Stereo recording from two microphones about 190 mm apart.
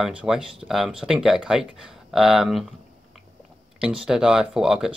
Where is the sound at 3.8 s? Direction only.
5° right (ahead or behind).